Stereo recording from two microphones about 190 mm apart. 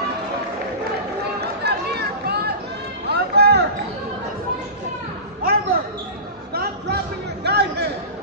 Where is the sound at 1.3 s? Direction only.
60° right (ahead or behind).